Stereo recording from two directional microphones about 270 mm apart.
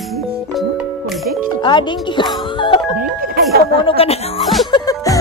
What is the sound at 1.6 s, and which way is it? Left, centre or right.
Music, centre.